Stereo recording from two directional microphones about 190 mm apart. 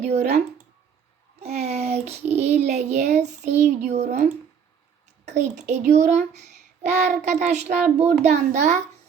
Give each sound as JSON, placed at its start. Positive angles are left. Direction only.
{"t": 0.0, "sound": "a child's voice", "side_deg": -35}
{"t": 1.5, "sound": "a child's voice", "side_deg": -35}